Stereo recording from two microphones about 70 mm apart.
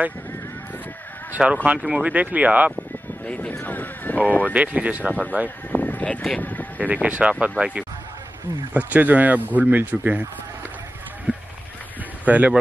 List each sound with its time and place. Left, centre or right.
1.3 s speech: centre
2.1 s speech: right
3.3 s speech: centre
4.5 s speech: centre
5.7 s a sound: left
6.8 s speech: centre
11.3 s a sound: right
12.3 s speech: right